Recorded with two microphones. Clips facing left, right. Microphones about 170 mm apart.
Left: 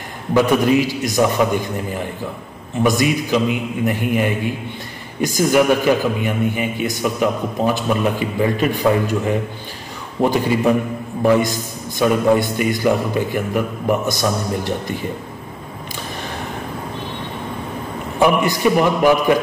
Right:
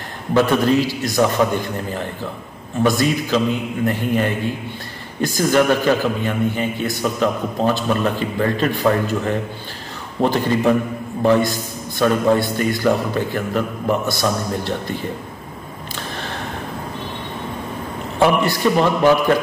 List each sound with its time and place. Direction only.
0.3 s a man's voice: 10° left (ahead or behind)
18.2 s a man's voice: 15° left (ahead or behind)